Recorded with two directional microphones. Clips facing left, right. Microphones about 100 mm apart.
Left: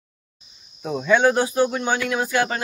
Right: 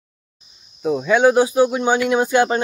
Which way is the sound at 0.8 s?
10° right (ahead or behind).